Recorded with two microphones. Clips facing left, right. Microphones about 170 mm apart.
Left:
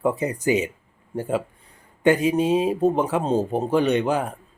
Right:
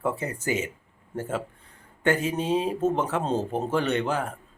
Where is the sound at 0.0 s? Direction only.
15° left (ahead or behind).